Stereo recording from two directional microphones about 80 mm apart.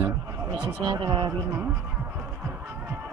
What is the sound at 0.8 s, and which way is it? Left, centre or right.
Speech, right.